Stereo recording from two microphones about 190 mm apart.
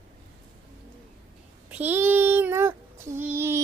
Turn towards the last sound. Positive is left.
turn(degrees=-15)  # may be behind; listen again after turning